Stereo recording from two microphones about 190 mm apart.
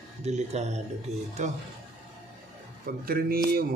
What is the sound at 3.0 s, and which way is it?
Speech, 50° right (ahead or behind).